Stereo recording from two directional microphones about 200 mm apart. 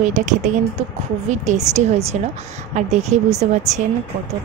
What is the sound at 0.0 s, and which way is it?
Speech, 40° right (ahead or behind).